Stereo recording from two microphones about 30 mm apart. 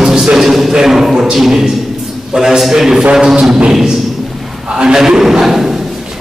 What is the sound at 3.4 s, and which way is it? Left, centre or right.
Music, right.